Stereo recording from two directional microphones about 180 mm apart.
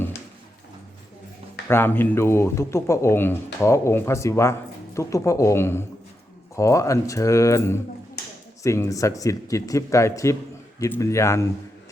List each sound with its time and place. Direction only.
1.6 s speech: 10° left (ahead or behind)